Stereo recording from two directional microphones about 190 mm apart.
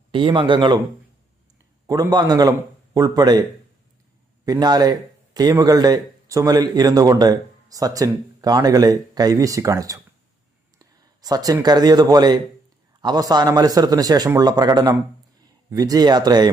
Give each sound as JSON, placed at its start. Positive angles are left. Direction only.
{"t": 0.1, "sound": "a man's voice", "side_deg": -25}
{"t": 1.9, "sound": "a man's voice", "side_deg": -20}
{"t": 4.4, "sound": "a man's voice", "side_deg": -20}